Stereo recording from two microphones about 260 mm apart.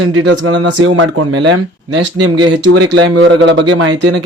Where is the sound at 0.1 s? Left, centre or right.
Right.